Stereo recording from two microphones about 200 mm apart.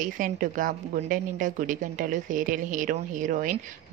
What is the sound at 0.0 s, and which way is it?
A woman's voice, 40° right (ahead or behind).